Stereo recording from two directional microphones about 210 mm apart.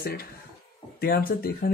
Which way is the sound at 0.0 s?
50° left (ahead or behind).